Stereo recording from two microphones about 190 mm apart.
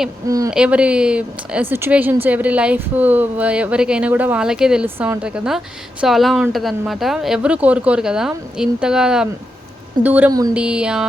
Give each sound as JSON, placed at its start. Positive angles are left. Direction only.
{"t": 0.3, "sound": "a woman's voice", "side_deg": -15}
{"t": 0.5, "sound": "a woman's voice", "side_deg": -5}